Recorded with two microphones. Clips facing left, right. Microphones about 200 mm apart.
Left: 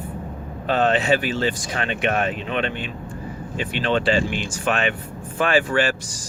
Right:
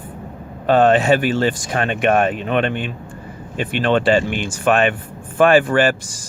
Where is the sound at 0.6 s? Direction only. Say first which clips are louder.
Right 6 dB; 50° right (ahead or behind).